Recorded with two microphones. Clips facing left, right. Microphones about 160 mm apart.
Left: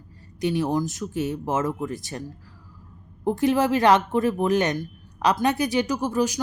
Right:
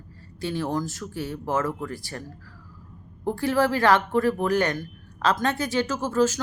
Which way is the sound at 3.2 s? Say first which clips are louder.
Left 2 dB; 20° left (ahead or behind).